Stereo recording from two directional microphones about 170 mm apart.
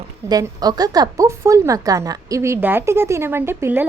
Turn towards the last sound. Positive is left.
turn(degrees=-10)  # may be behind; listen again after turning